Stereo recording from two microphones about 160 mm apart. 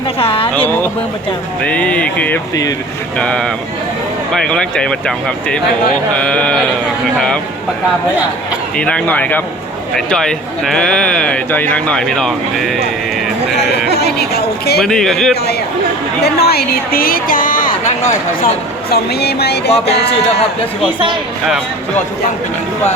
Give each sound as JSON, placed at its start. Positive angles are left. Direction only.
{"t": 0.2, "sound": "a sound", "side_deg": 35}
{"t": 0.5, "sound": "speech", "side_deg": 10}
{"t": 8.7, "sound": "speech", "side_deg": 5}
{"t": 13.9, "sound": "a woman's voice", "side_deg": 85}
{"t": 14.8, "sound": "speech", "side_deg": 5}
{"t": 16.2, "sound": "a woman's voice", "side_deg": 80}
{"t": 18.9, "sound": "speech", "side_deg": 90}
{"t": 19.7, "sound": "speech", "side_deg": 40}